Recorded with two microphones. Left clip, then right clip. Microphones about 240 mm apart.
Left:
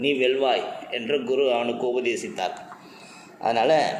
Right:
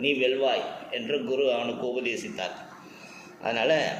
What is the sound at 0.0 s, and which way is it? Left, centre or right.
A man's voice, left.